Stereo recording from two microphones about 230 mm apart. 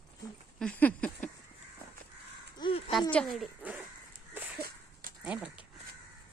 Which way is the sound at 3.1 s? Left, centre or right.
Centre.